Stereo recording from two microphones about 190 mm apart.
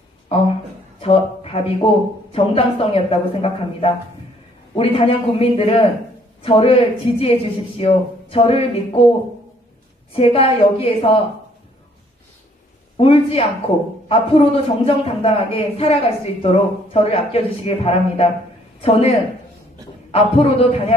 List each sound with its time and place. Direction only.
0.3 s a sound: 30° left (ahead or behind)
2.3 s a woman's voice: 30° left (ahead or behind)
10.1 s a woman's voice: 30° left (ahead or behind)
12.9 s a man's voice: 30° left (ahead or behind)